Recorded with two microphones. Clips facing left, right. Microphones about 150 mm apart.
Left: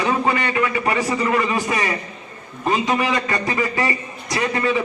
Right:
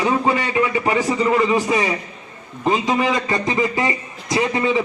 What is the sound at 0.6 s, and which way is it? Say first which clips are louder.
A man's voice: right 2 dB; 20° right (ahead or behind).